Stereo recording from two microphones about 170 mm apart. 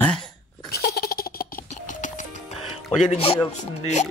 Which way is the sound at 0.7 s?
65° left (ahead or behind).